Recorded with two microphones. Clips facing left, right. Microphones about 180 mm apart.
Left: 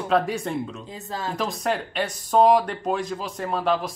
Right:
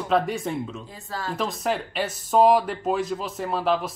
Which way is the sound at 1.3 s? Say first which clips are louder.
Even; centre (ahead or behind).